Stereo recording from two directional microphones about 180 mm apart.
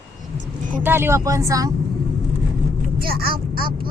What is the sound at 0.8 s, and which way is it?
Speech, 15° right (ahead or behind).